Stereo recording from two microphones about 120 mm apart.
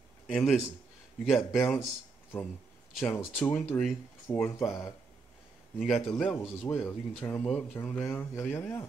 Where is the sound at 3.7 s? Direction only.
20° left (ahead or behind).